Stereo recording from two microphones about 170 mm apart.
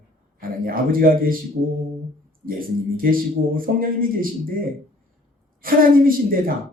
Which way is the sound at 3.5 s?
55° right (ahead or behind).